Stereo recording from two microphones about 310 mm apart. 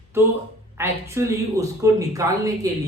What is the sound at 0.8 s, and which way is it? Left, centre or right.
Speech, centre.